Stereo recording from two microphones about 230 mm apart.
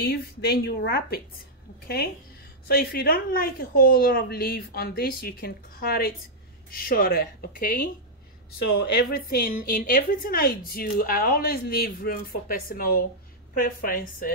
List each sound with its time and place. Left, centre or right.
0.0 s a woman's voice: left
2.7 s a woman's voice: left